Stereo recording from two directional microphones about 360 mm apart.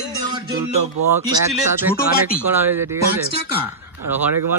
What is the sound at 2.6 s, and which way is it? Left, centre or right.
Speech, centre.